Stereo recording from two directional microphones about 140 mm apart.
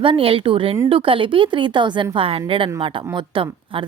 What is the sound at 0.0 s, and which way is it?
Speech, 40° right (ahead or behind).